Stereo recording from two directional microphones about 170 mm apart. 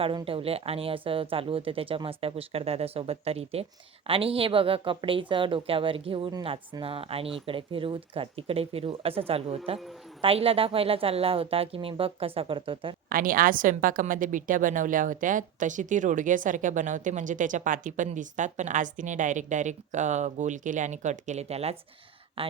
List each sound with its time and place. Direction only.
0.0 s speech: 30° right (ahead or behind)
13.1 s a woman's voice: 55° right (ahead or behind); by 22.5 s 35° right (ahead or behind)